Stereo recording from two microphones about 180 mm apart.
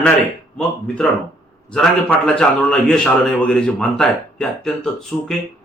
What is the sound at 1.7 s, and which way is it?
A man's voice, 5° left (ahead or behind).